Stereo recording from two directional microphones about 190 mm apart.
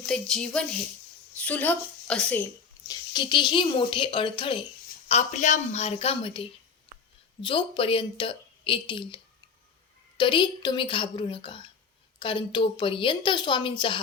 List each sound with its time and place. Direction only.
0.0 s a woman's voice: 5° left (ahead or behind); by 4.6 s 25° left (ahead or behind)
5.0 s a woman's voice: 35° left (ahead or behind)